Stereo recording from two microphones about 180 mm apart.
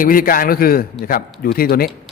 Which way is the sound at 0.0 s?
50° left (ahead or behind).